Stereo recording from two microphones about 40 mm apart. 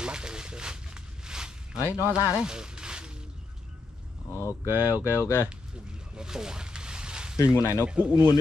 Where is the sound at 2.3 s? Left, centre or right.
Centre.